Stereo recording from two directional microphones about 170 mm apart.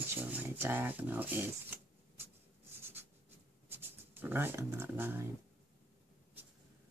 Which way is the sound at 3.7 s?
15° right (ahead or behind).